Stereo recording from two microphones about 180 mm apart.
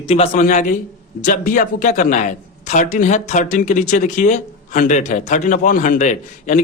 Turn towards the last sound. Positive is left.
turn(degrees=45)  # may be behind; listen again after turning